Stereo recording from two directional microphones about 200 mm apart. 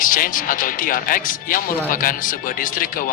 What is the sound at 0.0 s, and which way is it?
Speech, 45° left (ahead or behind).